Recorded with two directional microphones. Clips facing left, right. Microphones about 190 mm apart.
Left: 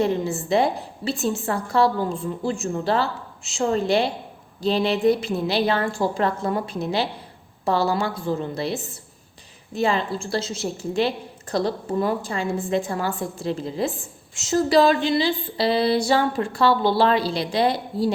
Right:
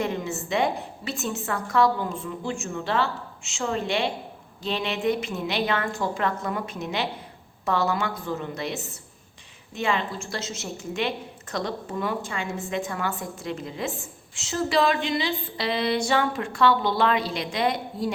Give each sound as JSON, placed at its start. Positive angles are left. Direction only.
{"t": 0.0, "sound": "a woman's voice", "side_deg": 35}